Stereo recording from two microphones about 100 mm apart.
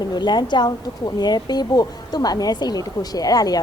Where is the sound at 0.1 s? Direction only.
45° left (ahead or behind).